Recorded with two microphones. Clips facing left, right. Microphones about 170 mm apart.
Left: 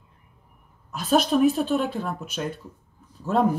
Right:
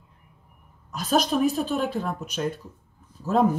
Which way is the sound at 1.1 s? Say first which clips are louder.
Left 3 dB; 40° right (ahead or behind).